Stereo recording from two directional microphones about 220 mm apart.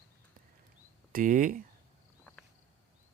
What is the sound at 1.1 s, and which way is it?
Speech, 40° right (ahead or behind).